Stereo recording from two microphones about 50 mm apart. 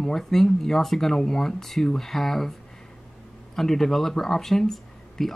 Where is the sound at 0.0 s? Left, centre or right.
Centre.